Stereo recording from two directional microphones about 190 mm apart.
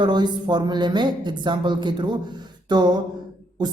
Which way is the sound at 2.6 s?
20° right (ahead or behind).